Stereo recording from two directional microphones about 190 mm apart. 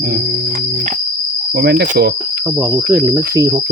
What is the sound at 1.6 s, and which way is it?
Cricket, 55° right (ahead or behind).